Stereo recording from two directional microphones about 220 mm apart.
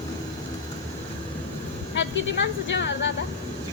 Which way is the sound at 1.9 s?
55° left (ahead or behind).